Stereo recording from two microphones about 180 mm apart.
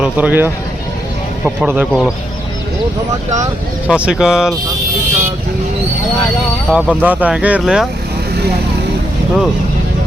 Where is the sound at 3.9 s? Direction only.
5° right (ahead or behind).